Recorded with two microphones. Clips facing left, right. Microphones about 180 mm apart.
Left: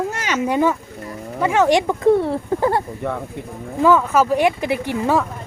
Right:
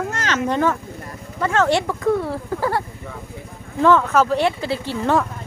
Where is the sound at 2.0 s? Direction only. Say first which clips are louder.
Left 5 dB; 25° left (ahead or behind).